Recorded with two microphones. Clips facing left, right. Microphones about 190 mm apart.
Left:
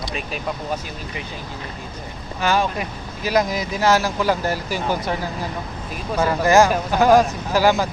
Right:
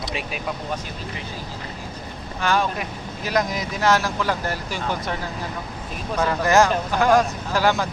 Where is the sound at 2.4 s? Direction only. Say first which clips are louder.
Left 2 dB; 5° left (ahead or behind).